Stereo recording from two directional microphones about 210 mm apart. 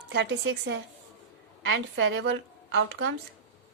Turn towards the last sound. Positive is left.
turn(degrees=-60)  # may be behind; listen again after turning